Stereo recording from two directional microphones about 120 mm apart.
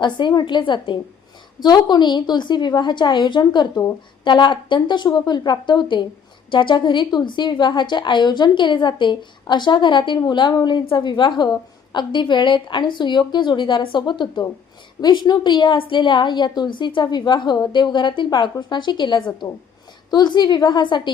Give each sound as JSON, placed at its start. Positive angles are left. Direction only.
{"t": 0.0, "sound": "a woman's voice", "side_deg": 40}